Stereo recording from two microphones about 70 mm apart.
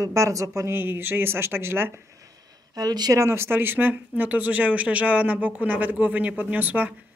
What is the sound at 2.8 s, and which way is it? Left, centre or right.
Speech, right.